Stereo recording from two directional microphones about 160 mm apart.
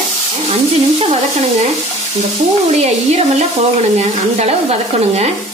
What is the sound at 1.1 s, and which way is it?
Speech, 45° right (ahead or behind).